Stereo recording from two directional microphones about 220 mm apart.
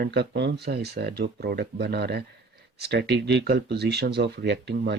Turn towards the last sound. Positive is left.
turn(degrees=-50)  # may be behind; listen again after turning